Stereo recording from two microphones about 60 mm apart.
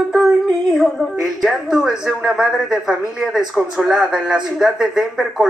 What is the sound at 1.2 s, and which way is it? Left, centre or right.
A woman's voice, centre.